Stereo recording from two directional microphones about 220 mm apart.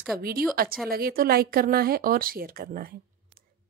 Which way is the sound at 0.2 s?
45° right (ahead or behind).